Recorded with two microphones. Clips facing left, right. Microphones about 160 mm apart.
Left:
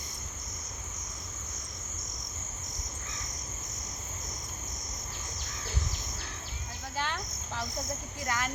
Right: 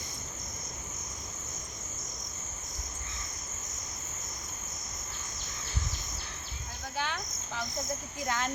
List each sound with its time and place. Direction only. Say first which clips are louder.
6.9 s cricket: even; centre (ahead or behind)
8.2 s speech: right 1 dB; 25° right (ahead or behind)